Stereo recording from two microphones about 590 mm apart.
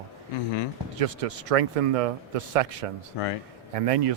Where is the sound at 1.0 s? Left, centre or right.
Right.